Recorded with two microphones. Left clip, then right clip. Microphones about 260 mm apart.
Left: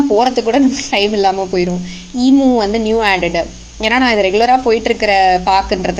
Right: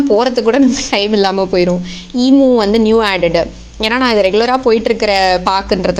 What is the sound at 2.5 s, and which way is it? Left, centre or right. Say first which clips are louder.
A woman's voice: right 3 dB; right.